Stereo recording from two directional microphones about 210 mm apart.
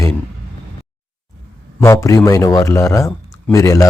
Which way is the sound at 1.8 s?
15° left (ahead or behind).